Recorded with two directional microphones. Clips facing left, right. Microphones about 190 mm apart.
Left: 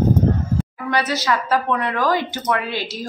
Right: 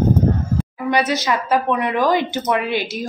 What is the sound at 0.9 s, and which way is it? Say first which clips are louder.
Speech: right 1 dB; 15° right (ahead or behind).